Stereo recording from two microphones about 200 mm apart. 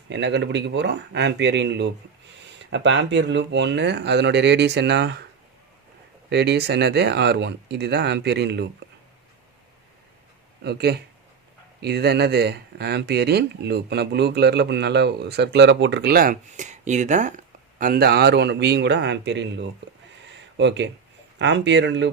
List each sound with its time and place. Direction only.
0.1 s speech: 60° right (ahead or behind)
6.3 s speech: 55° right (ahead or behind)
10.6 s speech: 55° right (ahead or behind)